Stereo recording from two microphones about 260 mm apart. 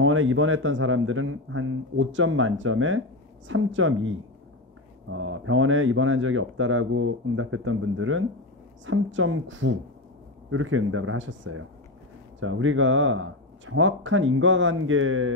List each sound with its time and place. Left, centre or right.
0.0 s speech: right
5.1 s speech: right